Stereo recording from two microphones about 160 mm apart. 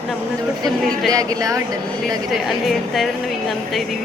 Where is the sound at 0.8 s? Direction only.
Centre (ahead or behind).